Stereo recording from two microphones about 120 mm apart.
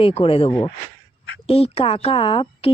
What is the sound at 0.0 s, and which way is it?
Speech, 50° left (ahead or behind).